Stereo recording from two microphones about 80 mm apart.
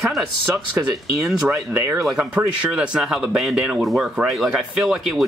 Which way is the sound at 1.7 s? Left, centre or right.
Right.